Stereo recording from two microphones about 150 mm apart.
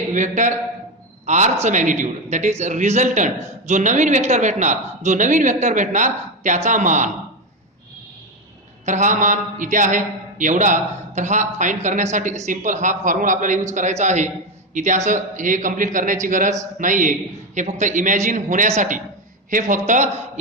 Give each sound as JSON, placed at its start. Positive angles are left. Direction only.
{"t": 0.1, "sound": "a man's voice", "side_deg": -55}
{"t": 8.9, "sound": "a man's voice", "side_deg": -55}